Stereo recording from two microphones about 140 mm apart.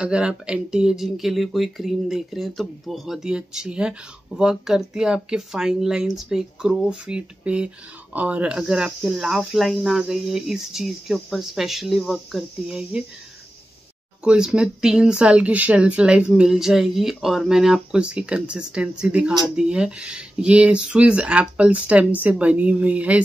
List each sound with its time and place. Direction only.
0.0 s speech: 5° right (ahead or behind)
14.2 s speech: 5° right (ahead or behind)